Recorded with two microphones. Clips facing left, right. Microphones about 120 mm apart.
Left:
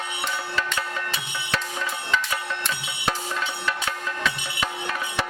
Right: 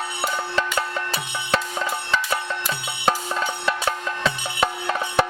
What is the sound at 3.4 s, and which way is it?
Music, 35° right (ahead or behind).